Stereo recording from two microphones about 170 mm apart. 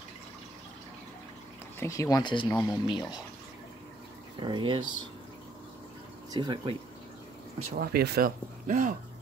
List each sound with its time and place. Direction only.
1.8 s speech: 20° left (ahead or behind)
2.5 s speech: 5° left (ahead or behind)
2.9 s speech: 25° left (ahead or behind)
4.4 s speech: 30° right (ahead or behind)
6.3 s speech: 25° right (ahead or behind)
7.7 s speech: 60° right (ahead or behind)
8.6 s speech: 50° right (ahead or behind)